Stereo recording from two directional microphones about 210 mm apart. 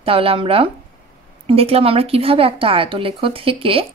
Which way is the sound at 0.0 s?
25° right (ahead or behind).